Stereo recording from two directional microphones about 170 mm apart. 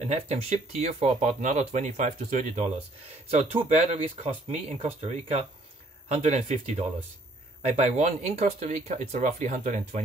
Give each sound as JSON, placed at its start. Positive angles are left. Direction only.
{"t": 0.1, "sound": "speech", "side_deg": -40}